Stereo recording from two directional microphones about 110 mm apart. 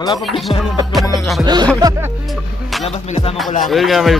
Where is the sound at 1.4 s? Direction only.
40° right (ahead or behind).